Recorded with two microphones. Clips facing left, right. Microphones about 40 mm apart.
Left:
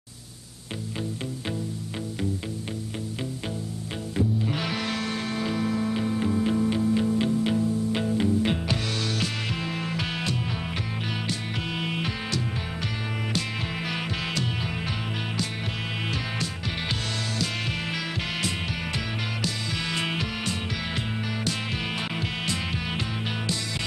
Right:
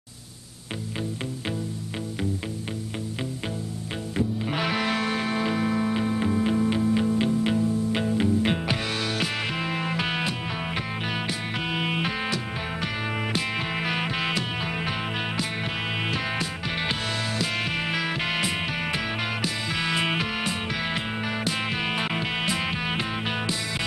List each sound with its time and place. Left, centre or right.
4.4 s music: centre